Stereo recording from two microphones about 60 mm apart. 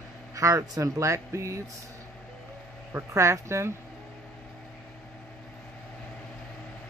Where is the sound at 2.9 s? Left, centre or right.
Right.